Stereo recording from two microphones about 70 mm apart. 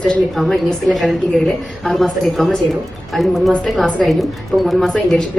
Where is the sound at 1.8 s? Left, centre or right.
Centre.